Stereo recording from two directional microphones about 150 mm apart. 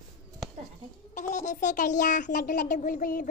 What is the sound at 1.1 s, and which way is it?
Speech, 60° left (ahead or behind).